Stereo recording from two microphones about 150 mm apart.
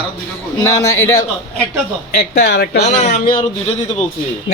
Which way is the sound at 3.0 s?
55° left (ahead or behind).